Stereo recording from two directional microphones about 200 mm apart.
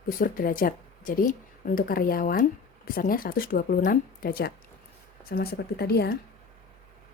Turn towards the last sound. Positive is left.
turn(degrees=55)  # may be behind; listen again after turning